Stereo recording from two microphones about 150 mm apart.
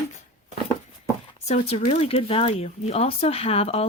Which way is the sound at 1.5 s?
45° left (ahead or behind).